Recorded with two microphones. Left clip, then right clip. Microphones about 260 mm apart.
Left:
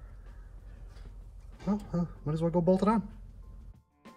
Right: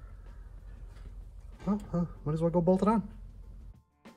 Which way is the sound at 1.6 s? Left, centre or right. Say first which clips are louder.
Even; centre.